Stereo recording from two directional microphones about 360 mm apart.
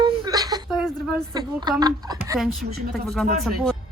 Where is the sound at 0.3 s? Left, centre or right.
Centre.